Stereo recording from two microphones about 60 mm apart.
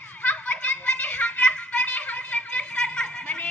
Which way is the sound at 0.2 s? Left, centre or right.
Left.